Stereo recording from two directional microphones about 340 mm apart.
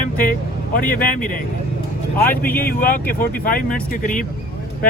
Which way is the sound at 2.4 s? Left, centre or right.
Centre.